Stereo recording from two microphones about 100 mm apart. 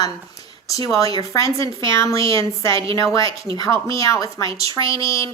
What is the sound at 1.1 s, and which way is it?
Speech, 35° left (ahead or behind).